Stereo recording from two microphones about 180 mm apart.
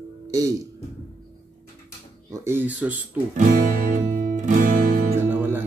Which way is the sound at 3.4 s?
45° right (ahead or behind).